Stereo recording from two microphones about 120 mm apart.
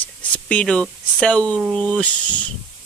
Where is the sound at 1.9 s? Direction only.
10° left (ahead or behind).